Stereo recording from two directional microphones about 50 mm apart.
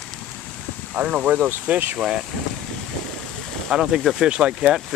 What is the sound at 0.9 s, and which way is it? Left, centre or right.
Speech, right.